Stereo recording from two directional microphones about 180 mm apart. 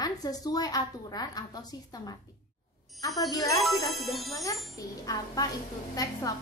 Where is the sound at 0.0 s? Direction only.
20° left (ahead or behind).